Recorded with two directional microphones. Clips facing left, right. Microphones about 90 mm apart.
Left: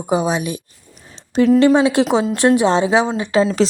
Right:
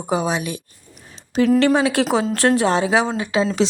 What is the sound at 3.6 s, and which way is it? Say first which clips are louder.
Speech: left 1 dB; 40° left (ahead or behind).